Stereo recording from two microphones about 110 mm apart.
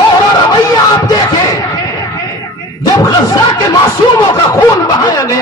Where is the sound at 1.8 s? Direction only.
30° left (ahead or behind).